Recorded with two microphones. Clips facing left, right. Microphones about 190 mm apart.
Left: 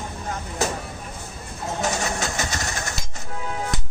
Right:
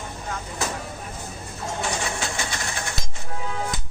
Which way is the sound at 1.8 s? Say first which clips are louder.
Left 3 dB; 40° left (ahead or behind).